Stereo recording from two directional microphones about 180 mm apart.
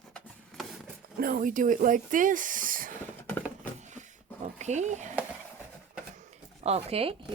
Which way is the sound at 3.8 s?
40° right (ahead or behind).